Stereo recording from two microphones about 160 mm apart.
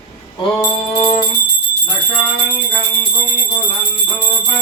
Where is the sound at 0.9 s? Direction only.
40° left (ahead or behind).